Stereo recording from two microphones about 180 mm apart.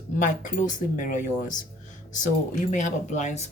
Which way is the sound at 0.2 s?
45° left (ahead or behind).